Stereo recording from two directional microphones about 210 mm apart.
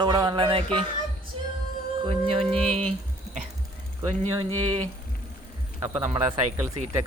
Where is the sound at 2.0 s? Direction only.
30° right (ahead or behind).